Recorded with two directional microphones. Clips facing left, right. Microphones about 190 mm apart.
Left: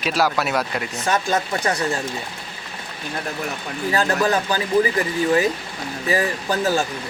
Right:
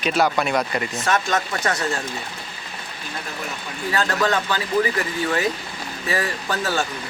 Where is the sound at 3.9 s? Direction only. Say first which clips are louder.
Left 2 dB; 25° left (ahead or behind).